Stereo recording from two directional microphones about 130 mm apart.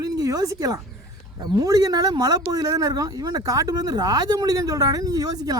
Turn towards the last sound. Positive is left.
turn(degrees=-30)  # may be behind; listen again after turning